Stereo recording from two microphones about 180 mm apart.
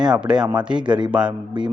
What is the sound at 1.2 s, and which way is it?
Speech, 25° right (ahead or behind).